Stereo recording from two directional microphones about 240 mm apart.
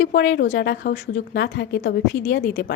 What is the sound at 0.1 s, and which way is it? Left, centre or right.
A woman's voice, left.